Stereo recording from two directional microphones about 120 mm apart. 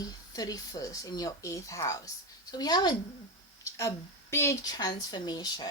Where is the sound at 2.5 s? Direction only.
35° left (ahead or behind).